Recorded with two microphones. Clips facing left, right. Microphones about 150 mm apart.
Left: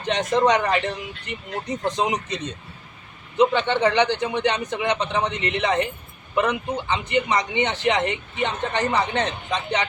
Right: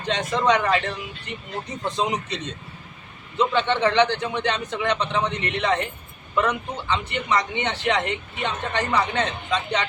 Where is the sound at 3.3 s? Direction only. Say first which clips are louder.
Left 2 dB; 20° left (ahead or behind).